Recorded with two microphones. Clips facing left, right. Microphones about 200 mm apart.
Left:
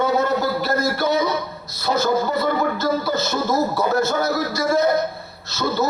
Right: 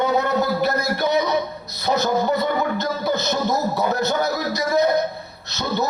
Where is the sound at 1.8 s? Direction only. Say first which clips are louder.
Even; 20° right (ahead or behind).